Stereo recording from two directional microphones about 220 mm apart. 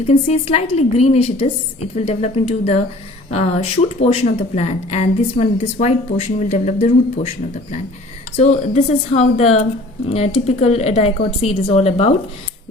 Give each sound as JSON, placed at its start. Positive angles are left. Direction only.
{"t": 0.1, "sound": "speech", "side_deg": 30}
{"t": 8.4, "sound": "speech", "side_deg": 30}